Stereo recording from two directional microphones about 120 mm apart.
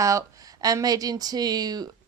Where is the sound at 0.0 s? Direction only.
25° right (ahead or behind).